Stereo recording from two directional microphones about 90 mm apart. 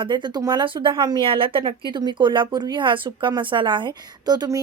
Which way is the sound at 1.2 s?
85° right.